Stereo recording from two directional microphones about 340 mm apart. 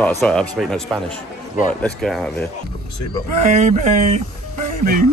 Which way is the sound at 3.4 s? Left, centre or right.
Centre.